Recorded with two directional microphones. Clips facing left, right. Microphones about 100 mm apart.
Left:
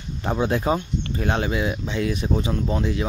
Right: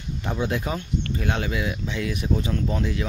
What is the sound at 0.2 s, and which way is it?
Speech, 40° left (ahead or behind).